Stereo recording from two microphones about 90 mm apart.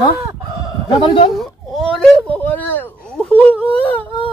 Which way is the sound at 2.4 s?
20° left (ahead or behind).